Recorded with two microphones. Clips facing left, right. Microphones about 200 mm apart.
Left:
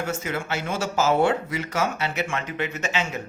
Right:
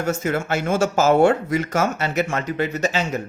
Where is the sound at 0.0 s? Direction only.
45° right (ahead or behind).